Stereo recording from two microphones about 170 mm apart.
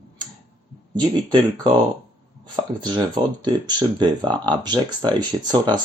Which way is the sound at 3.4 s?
25° right (ahead or behind).